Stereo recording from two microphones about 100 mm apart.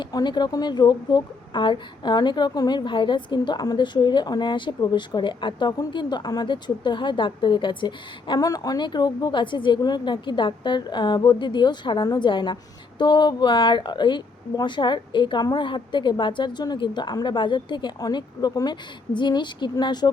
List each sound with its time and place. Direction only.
0.0 s a woman's voice: 45° left (ahead or behind)
8.4 s a woman's voice: 40° left (ahead or behind)